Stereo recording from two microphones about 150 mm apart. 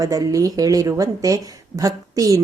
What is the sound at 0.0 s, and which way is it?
A woman's voice, 25° right (ahead or behind).